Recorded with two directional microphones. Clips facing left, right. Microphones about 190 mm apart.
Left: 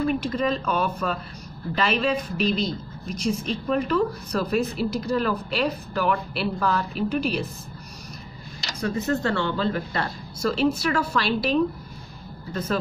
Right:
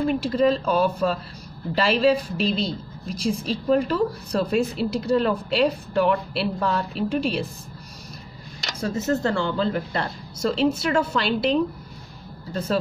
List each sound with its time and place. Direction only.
0.0 s speech: 30° right (ahead or behind)
8.8 s speech: 25° right (ahead or behind)